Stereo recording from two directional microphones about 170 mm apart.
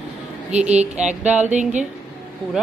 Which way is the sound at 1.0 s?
10° right (ahead or behind).